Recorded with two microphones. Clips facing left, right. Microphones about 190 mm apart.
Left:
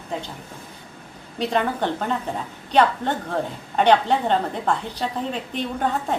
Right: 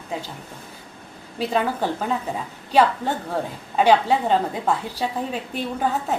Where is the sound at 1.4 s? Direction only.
5° right (ahead or behind).